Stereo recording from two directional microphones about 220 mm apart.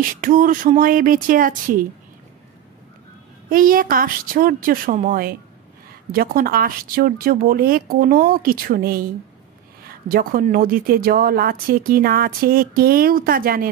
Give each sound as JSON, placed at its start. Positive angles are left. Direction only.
{"t": 0.0, "sound": "speech", "side_deg": -40}
{"t": 3.4, "sound": "speech", "side_deg": -40}